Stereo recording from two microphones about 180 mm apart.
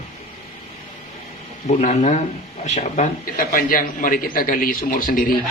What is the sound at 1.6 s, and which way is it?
A man's voice, 40° left (ahead or behind).